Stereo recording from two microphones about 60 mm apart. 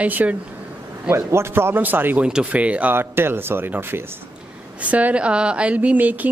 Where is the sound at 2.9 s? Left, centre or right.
Right.